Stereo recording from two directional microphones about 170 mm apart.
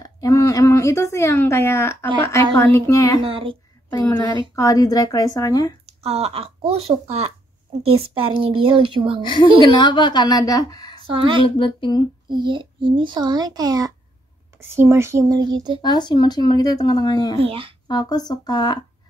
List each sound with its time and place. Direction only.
0.0 s a woman's voice: 20° left (ahead or behind)
3.2 s a woman's voice: 30° right (ahead or behind)
3.9 s speech: 20° left (ahead or behind)
5.9 s a woman's voice: 35° right (ahead or behind)
9.2 s speech: 30° left (ahead or behind)
11.0 s speech: 30° right (ahead or behind)
11.4 s speech: 30° left (ahead or behind)
12.3 s a child's voice: 25° right (ahead or behind)
15.8 s speech: 25° left (ahead or behind)
17.4 s a woman's voice: 30° right (ahead or behind)
17.8 s speech: 25° left (ahead or behind)